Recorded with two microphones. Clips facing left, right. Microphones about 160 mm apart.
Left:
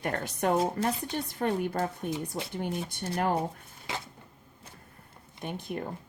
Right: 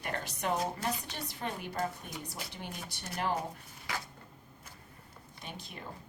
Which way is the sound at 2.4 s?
25° left (ahead or behind).